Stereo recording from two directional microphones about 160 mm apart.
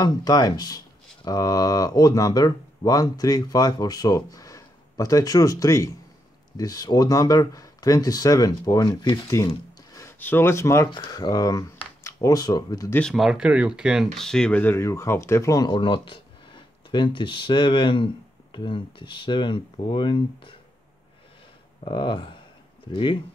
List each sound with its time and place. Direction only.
0.0 s speech: 25° left (ahead or behind)
12.9 s speech: centre (ahead or behind); by 20.5 s 30° left (ahead or behind)
21.8 s speech: 30° left (ahead or behind)